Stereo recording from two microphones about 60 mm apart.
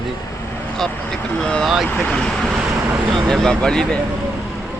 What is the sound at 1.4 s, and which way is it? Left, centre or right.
Speech, centre.